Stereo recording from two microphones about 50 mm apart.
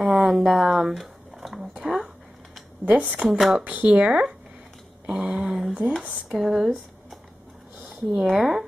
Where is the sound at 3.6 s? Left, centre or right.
Right.